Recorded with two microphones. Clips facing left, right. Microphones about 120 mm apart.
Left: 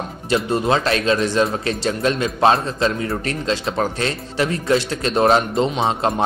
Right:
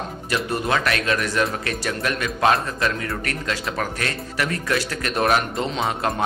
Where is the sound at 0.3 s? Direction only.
25° left (ahead or behind).